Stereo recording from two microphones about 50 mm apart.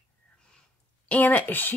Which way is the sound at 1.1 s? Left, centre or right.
Left.